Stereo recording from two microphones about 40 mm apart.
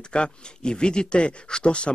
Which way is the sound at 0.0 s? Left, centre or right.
Left.